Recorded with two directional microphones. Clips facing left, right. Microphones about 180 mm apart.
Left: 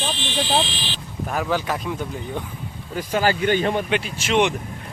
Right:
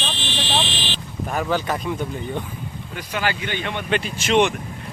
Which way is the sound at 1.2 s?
5° left (ahead or behind).